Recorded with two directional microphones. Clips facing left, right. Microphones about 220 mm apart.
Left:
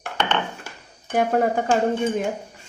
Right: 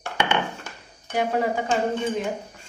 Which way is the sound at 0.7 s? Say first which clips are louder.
Left 1 dB; 10° left (ahead or behind).